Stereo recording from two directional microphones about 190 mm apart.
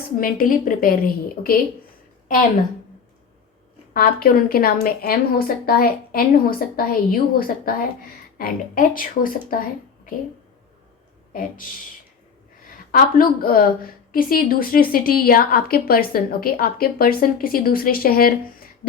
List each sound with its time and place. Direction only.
0.2 s a woman's voice: 50° left (ahead or behind)
3.9 s a woman's voice: 50° left (ahead or behind)
11.3 s speech: 45° left (ahead or behind)
12.9 s a woman's voice: 50° left (ahead or behind)